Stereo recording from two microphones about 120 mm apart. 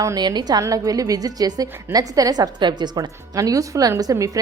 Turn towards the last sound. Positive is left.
turn(degrees=-25)  # may be behind; listen again after turning